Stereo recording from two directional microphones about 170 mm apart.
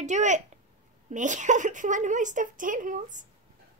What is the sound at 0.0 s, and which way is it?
A woman's voice, 45° right (ahead or behind).